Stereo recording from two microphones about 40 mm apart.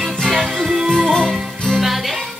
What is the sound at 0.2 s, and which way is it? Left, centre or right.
Music, centre.